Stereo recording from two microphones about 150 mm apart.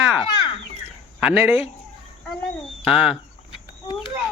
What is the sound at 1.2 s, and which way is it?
Speech, 15° right (ahead or behind).